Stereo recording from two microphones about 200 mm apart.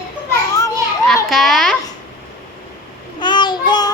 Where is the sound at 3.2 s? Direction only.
20° left (ahead or behind).